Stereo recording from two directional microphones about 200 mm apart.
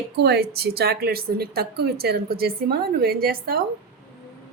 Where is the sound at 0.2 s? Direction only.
55° right (ahead or behind).